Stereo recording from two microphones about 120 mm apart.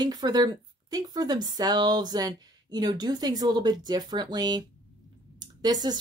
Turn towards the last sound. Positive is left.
turn(degrees=-35)  # may be behind; listen again after turning